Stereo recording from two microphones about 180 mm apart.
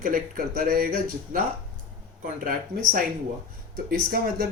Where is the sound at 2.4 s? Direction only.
55° right (ahead or behind).